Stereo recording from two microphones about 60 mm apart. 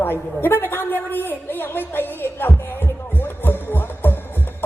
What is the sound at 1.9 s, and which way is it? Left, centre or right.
Music, left.